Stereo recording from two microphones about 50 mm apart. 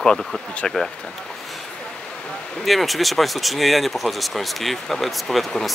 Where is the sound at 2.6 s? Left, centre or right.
Centre.